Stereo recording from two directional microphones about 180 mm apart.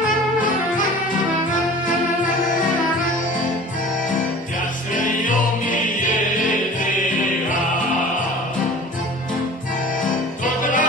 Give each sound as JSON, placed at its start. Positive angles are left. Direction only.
{"t": 4.9, "sound": "music", "side_deg": 45}
{"t": 10.4, "sound": "music", "side_deg": 45}